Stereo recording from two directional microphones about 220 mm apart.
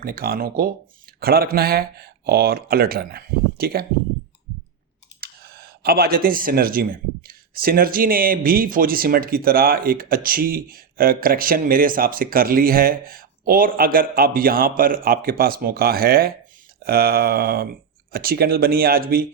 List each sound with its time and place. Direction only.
0.0 s speech: 45° right (ahead or behind)
5.2 s speech: 45° right (ahead or behind)